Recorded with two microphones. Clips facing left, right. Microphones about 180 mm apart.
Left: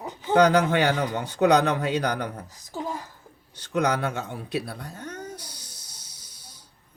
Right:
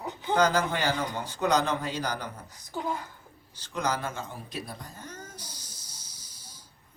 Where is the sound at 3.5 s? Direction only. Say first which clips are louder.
Left 6 dB; 65° left (ahead or behind).